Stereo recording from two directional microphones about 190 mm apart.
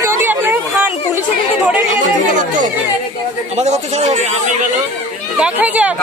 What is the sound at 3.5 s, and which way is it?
Speech, 35° right (ahead or behind).